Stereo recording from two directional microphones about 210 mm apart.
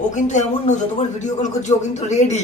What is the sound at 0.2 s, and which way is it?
A man's voice, 35° left (ahead or behind).